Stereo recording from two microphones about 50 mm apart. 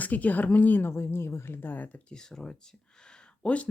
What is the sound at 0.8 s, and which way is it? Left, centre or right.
Speech, left.